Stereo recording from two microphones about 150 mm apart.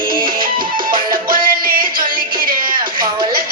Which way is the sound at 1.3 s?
70° right (ahead or behind).